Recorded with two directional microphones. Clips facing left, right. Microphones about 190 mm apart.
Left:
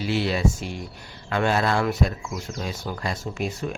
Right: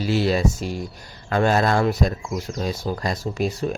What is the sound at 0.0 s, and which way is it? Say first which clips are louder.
Speech: right 3 dB; 40° right (ahead or behind).